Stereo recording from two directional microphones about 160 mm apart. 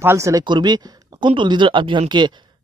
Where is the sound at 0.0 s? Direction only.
15° right (ahead or behind).